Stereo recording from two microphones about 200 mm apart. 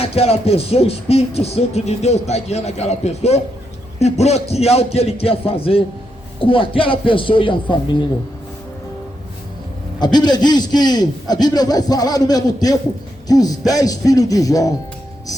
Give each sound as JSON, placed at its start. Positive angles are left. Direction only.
{"t": 0.0, "sound": "a sound", "side_deg": 30}
{"t": 6.4, "sound": "a man's voice", "side_deg": 25}
{"t": 10.0, "sound": "a man's voice", "side_deg": 20}
{"t": 13.2, "sound": "music", "side_deg": 20}